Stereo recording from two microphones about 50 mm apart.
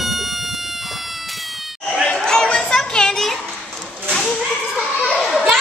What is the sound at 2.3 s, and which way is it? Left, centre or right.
Chatter, centre.